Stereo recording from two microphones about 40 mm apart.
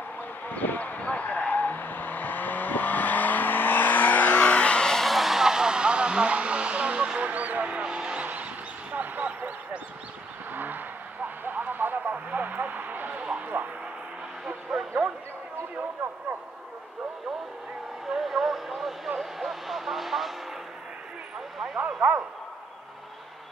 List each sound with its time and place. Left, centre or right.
0.5 s vehicle: left
5.0 s vehicle: centre; by 7.1 s right
7.2 s a sound: right
7.8 s vehicle: right
8.9 s a sound: right
10.5 s vehicle: right
11.2 s radio: right
14.4 s vehicle: centre
18.1 s vehicle: centre
21.7 s a sound: right